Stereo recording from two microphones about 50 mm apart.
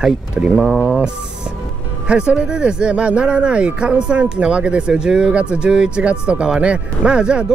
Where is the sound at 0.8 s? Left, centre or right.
Centre.